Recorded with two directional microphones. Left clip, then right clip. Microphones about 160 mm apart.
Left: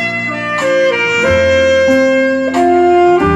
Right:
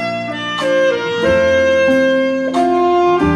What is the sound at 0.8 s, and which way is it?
Music, 15° right (ahead or behind).